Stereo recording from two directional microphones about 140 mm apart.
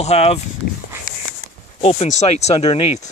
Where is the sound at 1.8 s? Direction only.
50° left (ahead or behind).